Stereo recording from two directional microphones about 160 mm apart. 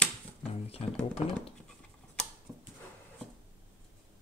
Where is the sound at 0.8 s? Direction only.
40° left (ahead or behind).